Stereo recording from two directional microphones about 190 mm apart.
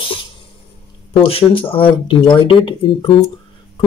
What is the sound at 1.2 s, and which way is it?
Speech, 30° left (ahead or behind).